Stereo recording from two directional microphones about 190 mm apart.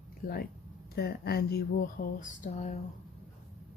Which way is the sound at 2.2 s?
40° left (ahead or behind).